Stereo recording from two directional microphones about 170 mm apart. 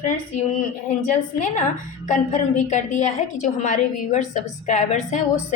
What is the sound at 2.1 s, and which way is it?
A woman's voice, 45° left (ahead or behind).